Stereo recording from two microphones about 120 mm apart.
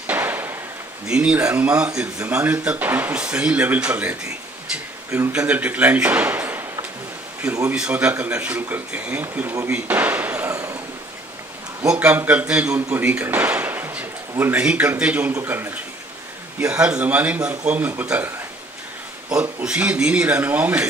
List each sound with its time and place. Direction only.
0.0 s a sound: 15° right (ahead or behind)
1.0 s speech: 10° right (ahead or behind)
5.3 s a man's voice: 10° right (ahead or behind)
7.7 s speech: 10° right (ahead or behind); by 10.8 s 25° right (ahead or behind)
11.9 s speech: 10° right (ahead or behind)
16.8 s speech: 10° right (ahead or behind)
19.6 s speech: 10° right (ahead or behind)